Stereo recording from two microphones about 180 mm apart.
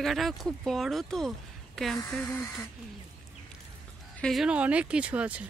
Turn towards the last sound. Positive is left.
turn(degrees=-5)  # may be behind; listen again after turning